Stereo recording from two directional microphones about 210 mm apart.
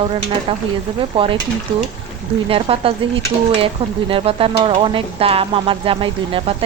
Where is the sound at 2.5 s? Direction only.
25° right (ahead or behind).